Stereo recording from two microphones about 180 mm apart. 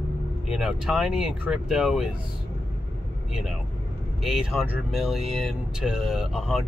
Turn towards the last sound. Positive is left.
turn(degrees=-5)  # may be behind; listen again after turning